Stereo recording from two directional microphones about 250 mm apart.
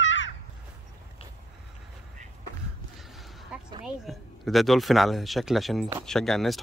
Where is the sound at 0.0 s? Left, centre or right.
Left.